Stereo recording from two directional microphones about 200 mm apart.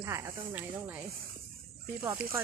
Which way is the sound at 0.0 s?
15° right (ahead or behind).